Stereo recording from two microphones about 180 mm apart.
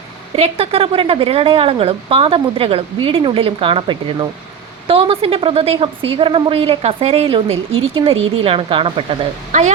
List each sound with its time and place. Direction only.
0.3 s a woman's voice: 35° right (ahead or behind)
9.5 s a woman's voice: 40° right (ahead or behind)